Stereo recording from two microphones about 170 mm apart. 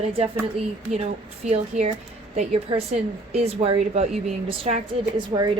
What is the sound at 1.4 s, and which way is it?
A woman's voice, 40° right (ahead or behind).